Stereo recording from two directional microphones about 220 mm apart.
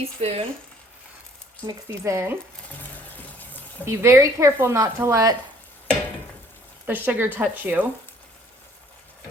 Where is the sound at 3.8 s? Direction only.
10° right (ahead or behind).